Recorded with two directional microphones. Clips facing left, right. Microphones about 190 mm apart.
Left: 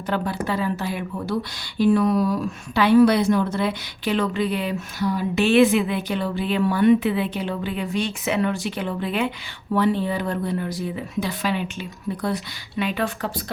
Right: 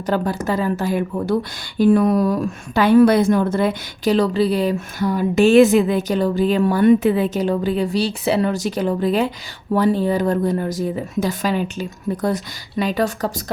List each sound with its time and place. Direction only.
0.0 s a woman's voice: 40° right (ahead or behind)